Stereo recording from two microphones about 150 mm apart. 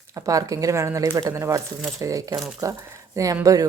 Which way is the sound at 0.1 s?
20° right (ahead or behind).